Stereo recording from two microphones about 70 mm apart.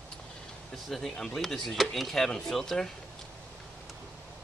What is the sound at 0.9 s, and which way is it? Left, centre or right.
Speech, centre.